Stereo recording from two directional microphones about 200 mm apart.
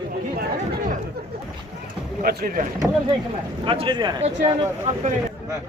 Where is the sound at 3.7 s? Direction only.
25° right (ahead or behind).